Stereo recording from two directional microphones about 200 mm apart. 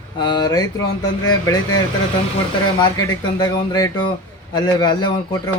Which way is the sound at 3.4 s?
20° left (ahead or behind).